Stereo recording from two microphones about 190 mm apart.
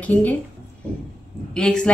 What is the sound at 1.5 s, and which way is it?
Speech, 5° left (ahead or behind).